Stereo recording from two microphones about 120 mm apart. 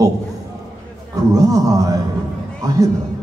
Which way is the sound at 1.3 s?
30° right (ahead or behind).